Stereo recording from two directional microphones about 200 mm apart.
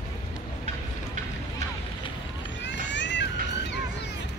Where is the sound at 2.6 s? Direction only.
65° left (ahead or behind).